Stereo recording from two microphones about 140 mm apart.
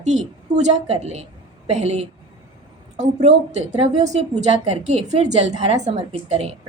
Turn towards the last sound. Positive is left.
turn(degrees=-45)  # may be behind; listen again after turning